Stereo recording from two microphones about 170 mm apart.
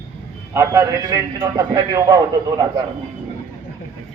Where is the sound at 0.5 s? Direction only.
20° right (ahead or behind).